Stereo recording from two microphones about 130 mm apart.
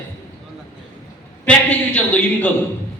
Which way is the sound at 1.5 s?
10° left (ahead or behind).